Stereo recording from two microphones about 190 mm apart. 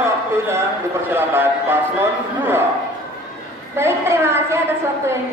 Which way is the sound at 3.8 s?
15° right (ahead or behind).